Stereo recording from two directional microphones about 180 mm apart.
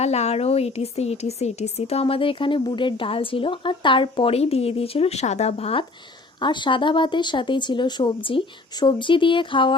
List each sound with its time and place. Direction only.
0.0 s speech: 35° left (ahead or behind)